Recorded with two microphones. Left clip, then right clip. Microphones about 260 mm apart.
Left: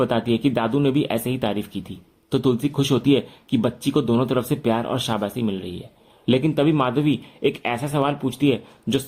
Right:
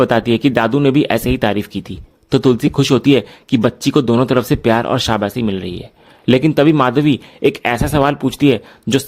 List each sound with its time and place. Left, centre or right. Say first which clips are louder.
0.0 s speech: right 8 dB; right